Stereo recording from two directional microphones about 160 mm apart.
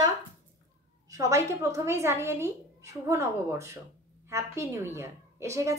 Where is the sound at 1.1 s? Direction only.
20° right (ahead or behind).